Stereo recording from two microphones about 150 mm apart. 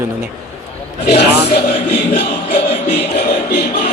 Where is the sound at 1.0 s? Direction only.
90° left.